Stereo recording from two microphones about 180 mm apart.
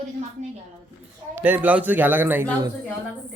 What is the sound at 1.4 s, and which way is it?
A man's voice, 10° right (ahead or behind).